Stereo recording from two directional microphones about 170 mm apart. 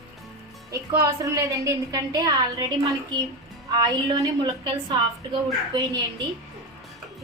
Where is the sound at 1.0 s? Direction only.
20° right (ahead or behind).